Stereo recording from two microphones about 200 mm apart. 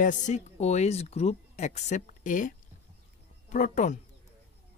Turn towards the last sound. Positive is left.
turn(degrees=40)  # may be behind; listen again after turning